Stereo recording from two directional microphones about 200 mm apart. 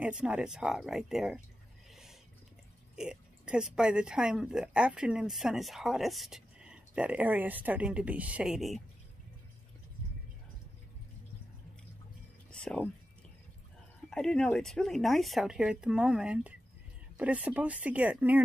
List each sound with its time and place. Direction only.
0.0 s speech: 5° right (ahead or behind)
3.0 s speech: 5° right (ahead or behind)
12.4 s music: 5° left (ahead or behind)
14.1 s speech: 5° left (ahead or behind)